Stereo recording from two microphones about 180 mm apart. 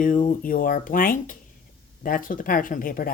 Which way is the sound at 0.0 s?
45° left (ahead or behind).